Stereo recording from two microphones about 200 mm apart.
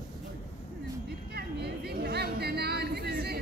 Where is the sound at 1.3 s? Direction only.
55° right (ahead or behind).